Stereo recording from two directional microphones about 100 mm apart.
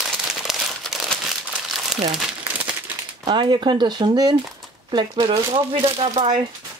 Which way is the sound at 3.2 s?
55° right (ahead or behind).